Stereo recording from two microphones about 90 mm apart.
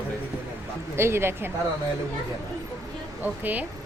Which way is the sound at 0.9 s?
30° right (ahead or behind).